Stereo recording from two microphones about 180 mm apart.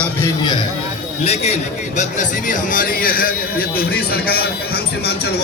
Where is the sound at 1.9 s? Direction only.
45° left (ahead or behind).